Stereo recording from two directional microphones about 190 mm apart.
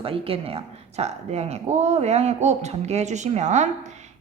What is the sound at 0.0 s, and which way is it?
A woman's voice, 30° right (ahead or behind).